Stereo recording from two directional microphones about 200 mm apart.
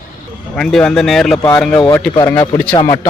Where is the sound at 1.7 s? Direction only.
20° left (ahead or behind).